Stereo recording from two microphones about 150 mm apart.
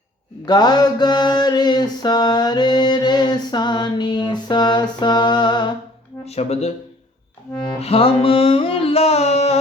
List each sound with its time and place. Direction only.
0.4 s mantra: 30° left (ahead or behind)
6.2 s speech: 45° left (ahead or behind)
7.8 s music: 40° left (ahead or behind)